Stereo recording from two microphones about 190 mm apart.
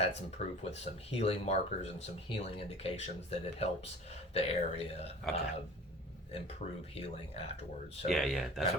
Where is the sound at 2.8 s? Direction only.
30° left (ahead or behind).